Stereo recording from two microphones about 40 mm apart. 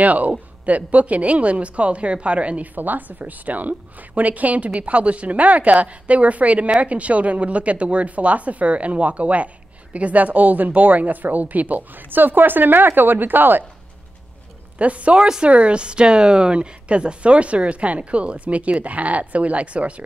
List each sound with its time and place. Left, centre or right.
0.0 s a woman's voice: right
2.7 s a woman's voice: right
14.8 s a woman's voice: right
15.1 s a woman's voice: centre
15.4 s a woman's voice: right